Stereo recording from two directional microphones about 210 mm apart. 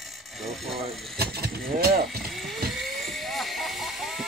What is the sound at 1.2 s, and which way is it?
Speech, 50° right (ahead or behind).